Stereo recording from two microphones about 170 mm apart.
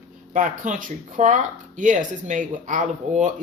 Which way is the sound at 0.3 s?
50° right (ahead or behind).